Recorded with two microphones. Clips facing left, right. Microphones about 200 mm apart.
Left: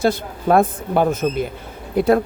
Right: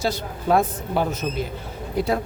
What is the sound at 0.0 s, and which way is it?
Speech, 55° left (ahead or behind).